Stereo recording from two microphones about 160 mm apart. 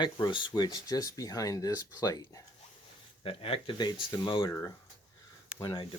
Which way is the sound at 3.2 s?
35° left (ahead or behind).